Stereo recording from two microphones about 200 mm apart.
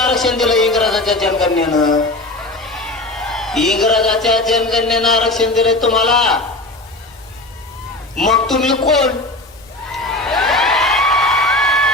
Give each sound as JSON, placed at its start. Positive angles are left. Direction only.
{"t": 0.0, "sound": "a man's voice", "side_deg": 0}
{"t": 1.7, "sound": "speech", "side_deg": 20}
{"t": 2.7, "sound": "speech", "side_deg": 0}
{"t": 8.1, "sound": "a man's voice", "side_deg": 0}
{"t": 10.2, "sound": "a sound", "side_deg": 0}